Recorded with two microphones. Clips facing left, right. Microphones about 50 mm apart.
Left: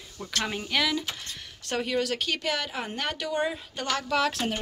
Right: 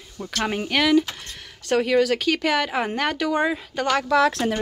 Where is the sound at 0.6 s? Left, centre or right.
Right.